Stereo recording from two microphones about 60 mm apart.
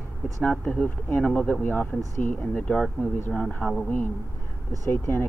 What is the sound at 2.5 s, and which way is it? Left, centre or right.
Speech, left.